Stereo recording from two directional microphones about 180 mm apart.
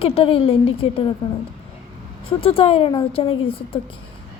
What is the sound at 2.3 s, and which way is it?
Speech, 30° left (ahead or behind).